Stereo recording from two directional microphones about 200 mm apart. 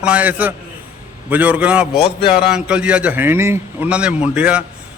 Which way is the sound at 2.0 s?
30° left (ahead or behind).